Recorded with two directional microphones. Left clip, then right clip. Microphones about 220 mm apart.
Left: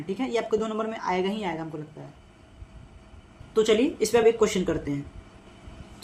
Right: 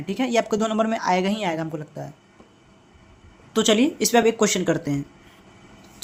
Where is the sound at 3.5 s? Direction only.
50° right (ahead or behind).